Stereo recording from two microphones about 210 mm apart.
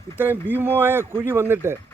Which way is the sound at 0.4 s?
10° right (ahead or behind).